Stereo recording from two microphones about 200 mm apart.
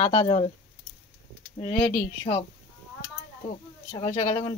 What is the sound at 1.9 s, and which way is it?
Speech, 25° left (ahead or behind).